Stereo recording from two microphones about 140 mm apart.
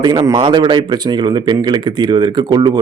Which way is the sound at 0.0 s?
30° right (ahead or behind).